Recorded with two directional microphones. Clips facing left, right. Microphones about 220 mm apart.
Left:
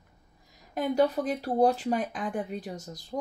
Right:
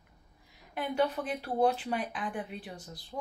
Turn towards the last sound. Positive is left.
turn(degrees=45)  # may be behind; listen again after turning